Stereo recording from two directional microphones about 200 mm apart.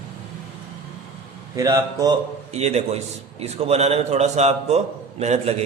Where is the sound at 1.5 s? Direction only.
15° right (ahead or behind).